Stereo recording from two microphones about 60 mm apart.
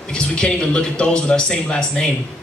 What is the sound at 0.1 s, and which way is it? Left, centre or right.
A man's voice, centre.